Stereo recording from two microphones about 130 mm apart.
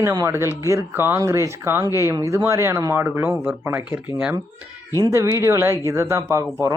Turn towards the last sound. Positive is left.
turn(degrees=-25)  # may be behind; listen again after turning